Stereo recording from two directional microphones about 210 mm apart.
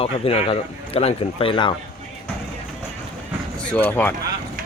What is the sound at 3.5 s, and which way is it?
Speech, 5° left (ahead or behind).